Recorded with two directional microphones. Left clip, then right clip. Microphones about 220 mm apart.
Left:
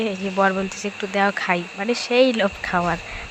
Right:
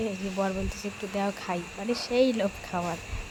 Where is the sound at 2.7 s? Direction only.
25° left (ahead or behind).